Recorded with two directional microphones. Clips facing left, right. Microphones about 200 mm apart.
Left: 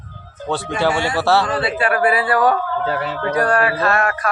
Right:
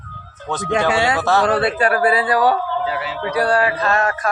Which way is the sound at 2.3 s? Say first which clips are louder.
Even; 10° right (ahead or behind).